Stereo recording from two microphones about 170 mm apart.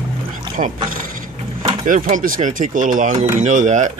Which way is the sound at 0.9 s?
55° right (ahead or behind).